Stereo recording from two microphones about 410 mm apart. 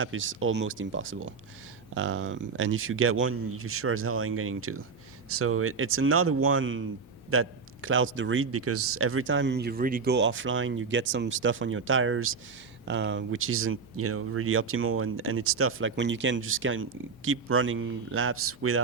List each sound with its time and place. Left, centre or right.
0.0 s a man's voice: right